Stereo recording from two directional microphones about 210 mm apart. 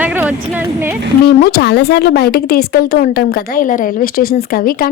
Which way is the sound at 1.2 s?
45° left (ahead or behind).